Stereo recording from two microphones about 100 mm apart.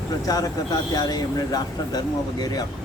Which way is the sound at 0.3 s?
40° left (ahead or behind).